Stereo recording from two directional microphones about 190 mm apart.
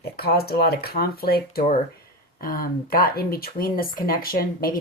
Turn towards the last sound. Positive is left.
turn(degrees=50)  # may be behind; listen again after turning